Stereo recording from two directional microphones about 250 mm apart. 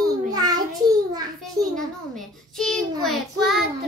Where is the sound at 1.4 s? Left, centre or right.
Centre.